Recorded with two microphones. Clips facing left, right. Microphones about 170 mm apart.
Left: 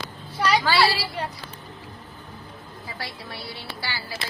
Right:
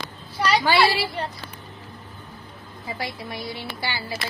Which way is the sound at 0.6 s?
15° right (ahead or behind).